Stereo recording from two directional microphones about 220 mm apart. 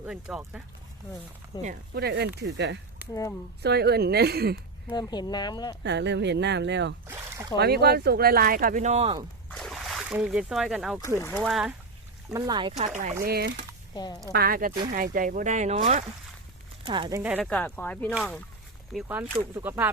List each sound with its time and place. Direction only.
0.0 s speech: 5° right (ahead or behind)
1.5 s speech: 15° left (ahead or behind)
2.0 s speech: 50° right (ahead or behind)
4.9 s speech: 20° left (ahead or behind)
5.8 s speech: 55° right (ahead or behind)
7.1 s speech: 10° right (ahead or behind)
7.6 s speech: 45° right (ahead or behind)
9.5 s speech: centre (ahead or behind)
12.3 s speech: 20° right (ahead or behind)
13.2 s speech: 45° right (ahead or behind)
13.9 s a woman's voice: 20° left (ahead or behind)
14.3 s speech: 40° right (ahead or behind); by 18.4 s centre (ahead or behind)
18.9 s speech: 10° right (ahead or behind)